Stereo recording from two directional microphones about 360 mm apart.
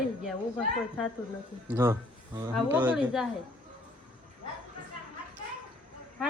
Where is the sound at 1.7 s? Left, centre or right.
Centre.